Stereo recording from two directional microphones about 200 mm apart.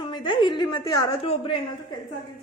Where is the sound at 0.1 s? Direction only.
25° left (ahead or behind).